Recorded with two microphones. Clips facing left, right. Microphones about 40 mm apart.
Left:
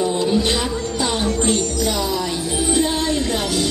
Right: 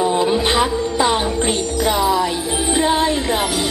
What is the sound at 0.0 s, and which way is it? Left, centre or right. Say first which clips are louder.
Music: right 2 dB; right.